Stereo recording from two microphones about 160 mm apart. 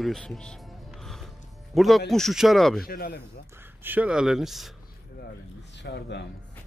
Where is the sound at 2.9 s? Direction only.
70° left (ahead or behind).